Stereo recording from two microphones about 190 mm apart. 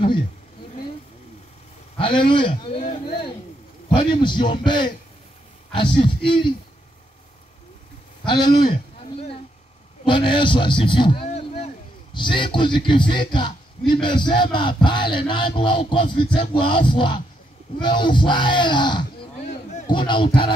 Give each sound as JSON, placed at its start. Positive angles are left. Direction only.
{"t": 2.0, "sound": "a man's voice", "side_deg": 25}
{"t": 2.8, "sound": "a sound", "side_deg": 35}
{"t": 3.9, "sound": "music", "side_deg": 25}
{"t": 8.3, "sound": "music", "side_deg": 25}
{"t": 10.0, "sound": "speech", "side_deg": 25}
{"t": 14.0, "sound": "music", "side_deg": 25}